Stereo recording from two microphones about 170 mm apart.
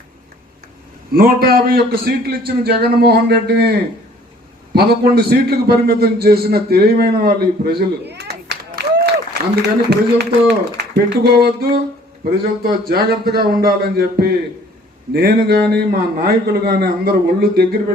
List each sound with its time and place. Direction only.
1.1 s a man's voice: 60° right (ahead or behind)